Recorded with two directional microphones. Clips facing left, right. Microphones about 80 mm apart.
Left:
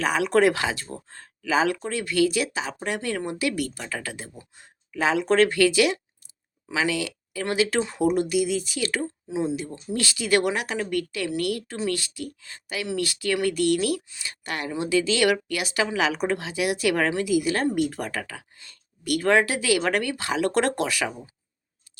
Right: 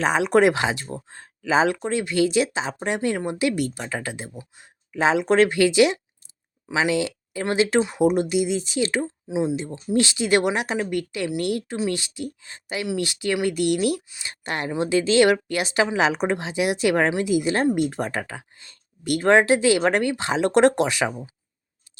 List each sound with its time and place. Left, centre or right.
0.0 s speech: right
7.8 s speech: centre